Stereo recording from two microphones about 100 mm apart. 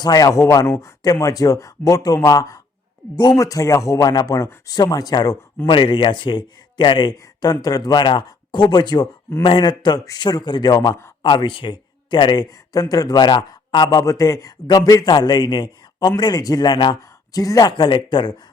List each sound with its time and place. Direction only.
0.0 s a man's voice: 40° left (ahead or behind)
5.6 s speech: 55° left (ahead or behind); by 11.0 s 40° left (ahead or behind)
11.2 s speech: 55° left (ahead or behind)
13.8 s a man's voice: 35° left (ahead or behind)